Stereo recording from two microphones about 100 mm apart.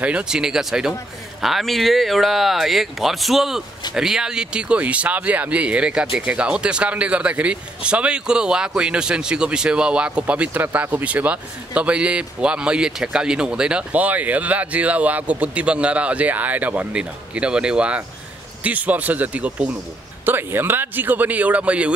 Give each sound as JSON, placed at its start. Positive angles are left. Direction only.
{"t": 0.0, "sound": "a man's voice", "side_deg": -10}